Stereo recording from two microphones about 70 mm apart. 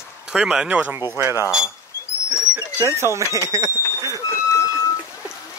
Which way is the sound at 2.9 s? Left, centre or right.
Right.